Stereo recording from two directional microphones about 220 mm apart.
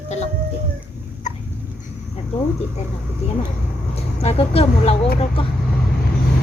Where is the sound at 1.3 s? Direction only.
35° left (ahead or behind).